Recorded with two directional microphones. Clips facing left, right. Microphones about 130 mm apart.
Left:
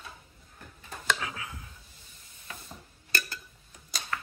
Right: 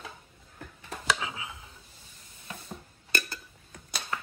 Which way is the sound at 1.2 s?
20° right (ahead or behind).